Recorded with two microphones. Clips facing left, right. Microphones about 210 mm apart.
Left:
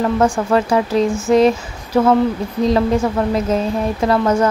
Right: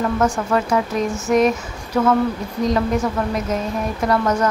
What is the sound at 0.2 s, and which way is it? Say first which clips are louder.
Speech: left 4 dB; 30° left (ahead or behind).